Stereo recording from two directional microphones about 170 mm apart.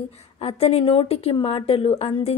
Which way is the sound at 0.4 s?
35° left (ahead or behind).